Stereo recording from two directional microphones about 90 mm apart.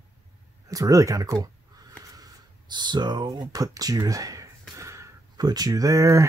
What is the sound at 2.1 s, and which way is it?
Speech, 50° right (ahead or behind).